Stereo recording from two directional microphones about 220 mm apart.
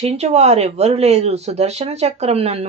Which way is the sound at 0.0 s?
30° right (ahead or behind).